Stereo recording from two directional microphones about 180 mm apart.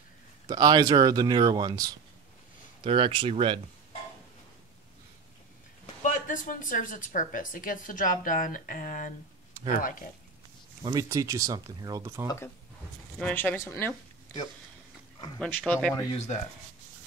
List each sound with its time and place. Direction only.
0.5 s speech: 20° right (ahead or behind)
6.0 s a woman's voice: 45° left (ahead or behind)
10.8 s speech: 20° right (ahead or behind)
13.2 s speech: 10° left (ahead or behind)
15.3 s speech: 5° left (ahead or behind)
16.1 s speech: 40° left (ahead or behind)